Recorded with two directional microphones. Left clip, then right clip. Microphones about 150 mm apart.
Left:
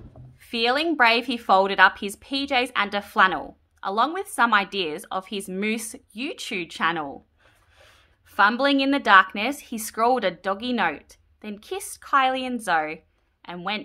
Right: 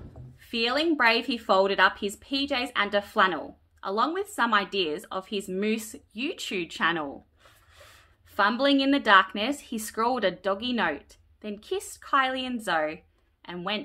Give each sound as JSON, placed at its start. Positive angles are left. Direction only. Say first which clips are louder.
{"t": 0.4, "sound": "speech", "louder": "left 4 dB", "side_deg": 40}
{"t": 8.3, "sound": "speech", "louder": "left 4 dB", "side_deg": 40}